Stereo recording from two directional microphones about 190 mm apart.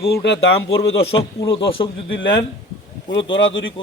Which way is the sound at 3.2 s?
80° left.